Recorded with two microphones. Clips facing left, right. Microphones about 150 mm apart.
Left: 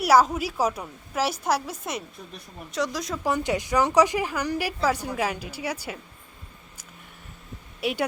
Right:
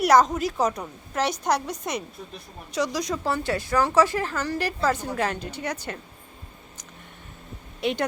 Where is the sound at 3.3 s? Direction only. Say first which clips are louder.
Left 4 dB; 15° left (ahead or behind).